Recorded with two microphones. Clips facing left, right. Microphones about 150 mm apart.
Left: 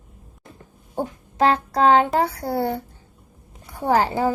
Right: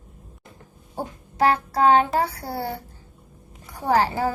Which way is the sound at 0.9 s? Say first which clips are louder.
Left 3 dB; 25° left (ahead or behind).